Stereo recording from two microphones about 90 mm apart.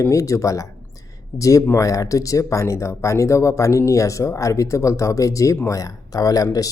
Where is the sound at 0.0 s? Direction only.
35° left (ahead or behind).